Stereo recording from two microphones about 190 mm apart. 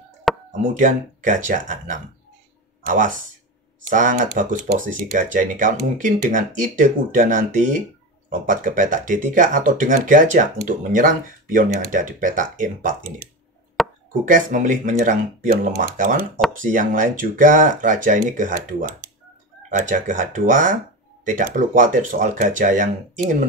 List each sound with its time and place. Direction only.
0.3 s chop: centre (ahead or behind)
0.7 s speech: 40° right (ahead or behind)
13.8 s chopping: centre (ahead or behind)
14.2 s speech: 45° right (ahead or behind)